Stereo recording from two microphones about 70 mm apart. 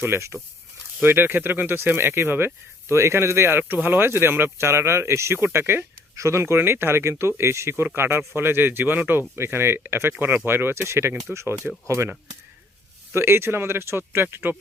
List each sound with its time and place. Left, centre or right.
0.0 s speech: right
6.1 s speech: right
13.1 s speech: right